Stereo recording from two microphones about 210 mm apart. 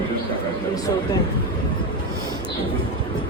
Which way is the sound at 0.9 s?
15° left (ahead or behind).